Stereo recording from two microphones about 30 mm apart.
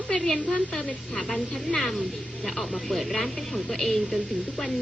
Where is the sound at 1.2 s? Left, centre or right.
Centre.